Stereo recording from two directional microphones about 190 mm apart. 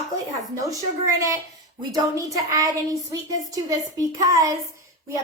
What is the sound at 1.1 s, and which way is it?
A woman's voice, 15° right (ahead or behind).